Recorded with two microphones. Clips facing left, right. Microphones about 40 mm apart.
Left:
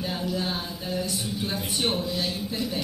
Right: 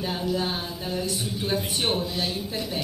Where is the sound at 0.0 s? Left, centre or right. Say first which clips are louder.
Right 2 dB; right.